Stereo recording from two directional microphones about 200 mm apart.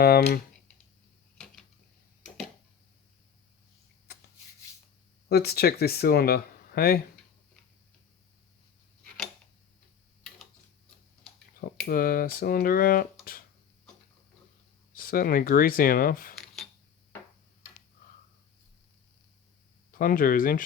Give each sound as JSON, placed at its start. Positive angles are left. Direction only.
{"t": 0.0, "sound": "speech", "side_deg": 50}
{"t": 4.1, "sound": "rub", "side_deg": 55}
{"t": 5.3, "sound": "speech", "side_deg": 50}
{"t": 11.9, "sound": "speech", "side_deg": 45}
{"t": 14.9, "sound": "speech", "side_deg": 45}
{"t": 19.9, "sound": "speech", "side_deg": 45}